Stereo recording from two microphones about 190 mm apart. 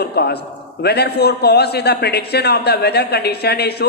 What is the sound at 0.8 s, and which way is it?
A man's voice, 60° left (ahead or behind).